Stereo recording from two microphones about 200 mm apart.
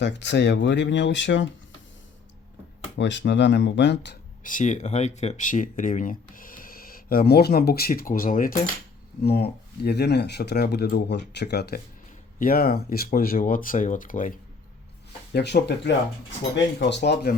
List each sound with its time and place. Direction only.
0.0 s speech: 60° left (ahead or behind)
2.9 s speech: 60° left (ahead or behind)
4.4 s speech: 40° left (ahead or behind)
15.3 s speech: 55° left (ahead or behind)